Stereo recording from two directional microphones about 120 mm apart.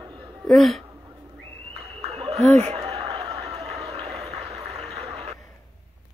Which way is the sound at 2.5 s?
65° right (ahead or behind).